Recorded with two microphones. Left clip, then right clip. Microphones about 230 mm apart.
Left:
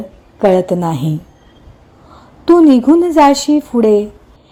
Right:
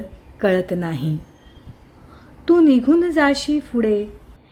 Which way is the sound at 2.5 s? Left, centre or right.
Centre.